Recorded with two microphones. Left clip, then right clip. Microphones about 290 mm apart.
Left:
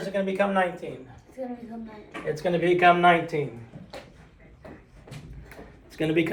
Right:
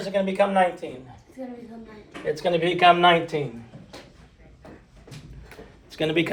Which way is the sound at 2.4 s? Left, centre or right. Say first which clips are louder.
Right 2 dB; right.